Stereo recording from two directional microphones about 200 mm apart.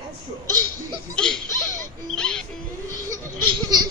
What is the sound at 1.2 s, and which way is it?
Laughter, 5° left (ahead or behind).